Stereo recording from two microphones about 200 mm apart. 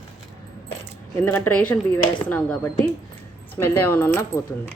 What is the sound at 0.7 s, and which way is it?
Speech, 10° left (ahead or behind).